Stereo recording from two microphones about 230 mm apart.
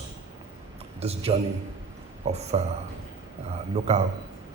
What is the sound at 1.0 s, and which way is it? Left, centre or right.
A man's voice, right.